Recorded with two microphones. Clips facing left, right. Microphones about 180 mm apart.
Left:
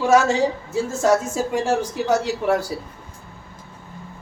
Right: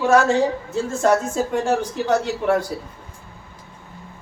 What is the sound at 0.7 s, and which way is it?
Speech, 5° left (ahead or behind).